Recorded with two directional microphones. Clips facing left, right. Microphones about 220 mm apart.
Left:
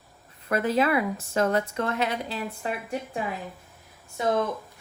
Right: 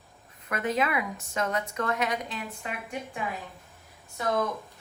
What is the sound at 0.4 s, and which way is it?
Speech, 30° left (ahead or behind).